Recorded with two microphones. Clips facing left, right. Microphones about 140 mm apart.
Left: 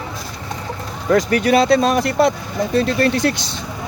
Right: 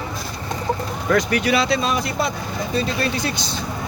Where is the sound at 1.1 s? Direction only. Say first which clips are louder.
Left 4 dB; 40° left (ahead or behind); by 3.3 s 70° left (ahead or behind).